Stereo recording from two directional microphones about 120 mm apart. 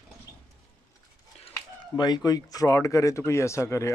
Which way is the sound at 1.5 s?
35° left (ahead or behind).